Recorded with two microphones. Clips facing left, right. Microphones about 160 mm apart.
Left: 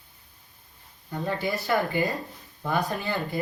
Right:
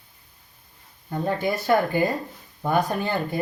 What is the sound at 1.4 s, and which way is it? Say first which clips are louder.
Speech: right 4 dB; 20° right (ahead or behind).